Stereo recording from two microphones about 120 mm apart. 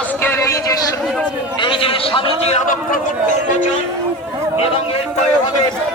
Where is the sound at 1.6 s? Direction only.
50° left (ahead or behind).